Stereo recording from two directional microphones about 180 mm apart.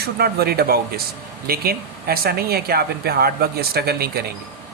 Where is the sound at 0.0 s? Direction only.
60° right (ahead or behind).